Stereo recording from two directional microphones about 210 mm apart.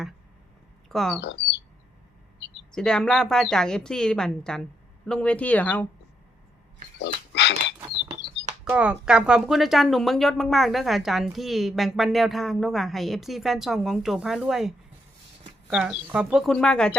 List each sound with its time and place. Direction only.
0.9 s speech: centre (ahead or behind)
2.7 s speech: 5° left (ahead or behind)
7.0 s pig: 55° left (ahead or behind)
8.6 s speech: 5° right (ahead or behind)